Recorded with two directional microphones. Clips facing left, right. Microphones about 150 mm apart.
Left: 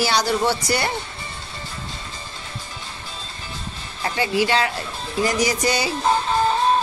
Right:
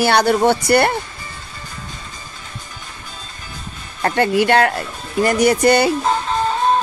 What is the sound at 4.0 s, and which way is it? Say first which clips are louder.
Speech: right 6 dB; 55° right (ahead or behind).